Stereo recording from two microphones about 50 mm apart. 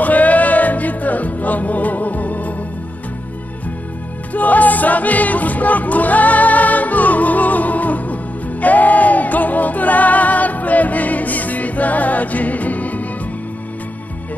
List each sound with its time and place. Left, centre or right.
0.0 s music: left
4.3 s music: left